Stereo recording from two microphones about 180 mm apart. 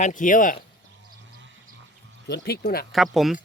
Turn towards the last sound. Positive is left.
turn(degrees=0)  # may be behind; listen again after turning